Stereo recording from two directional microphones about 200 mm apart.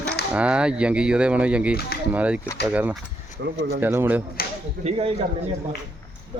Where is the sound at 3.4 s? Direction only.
60° right (ahead or behind).